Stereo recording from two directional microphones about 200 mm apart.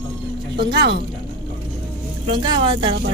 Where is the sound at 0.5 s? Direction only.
55° right (ahead or behind).